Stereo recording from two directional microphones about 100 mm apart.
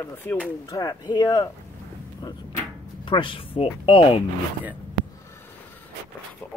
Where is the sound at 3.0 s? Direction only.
55° left (ahead or behind).